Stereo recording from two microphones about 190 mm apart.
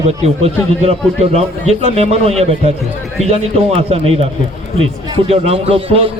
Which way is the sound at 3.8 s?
30° right (ahead or behind).